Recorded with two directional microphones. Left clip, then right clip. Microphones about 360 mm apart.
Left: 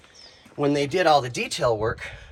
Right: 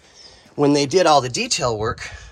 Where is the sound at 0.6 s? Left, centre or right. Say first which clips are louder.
Right 6 dB; centre.